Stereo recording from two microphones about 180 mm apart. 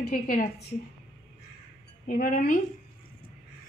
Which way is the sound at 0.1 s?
50° left (ahead or behind).